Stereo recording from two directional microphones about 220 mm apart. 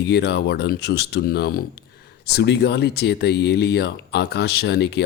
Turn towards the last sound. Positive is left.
turn(degrees=50)  # may be behind; listen again after turning